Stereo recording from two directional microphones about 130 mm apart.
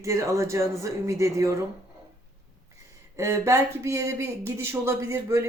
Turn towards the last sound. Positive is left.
turn(degrees=-20)  # may be behind; listen again after turning